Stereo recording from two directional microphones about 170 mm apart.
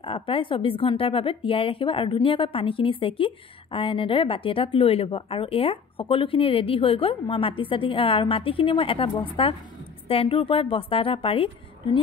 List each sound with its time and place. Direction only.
0.0 s a woman's voice: 30° left (ahead or behind)